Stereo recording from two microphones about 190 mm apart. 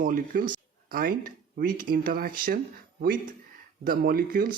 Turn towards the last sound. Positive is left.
turn(degrees=-50)  # may be behind; listen again after turning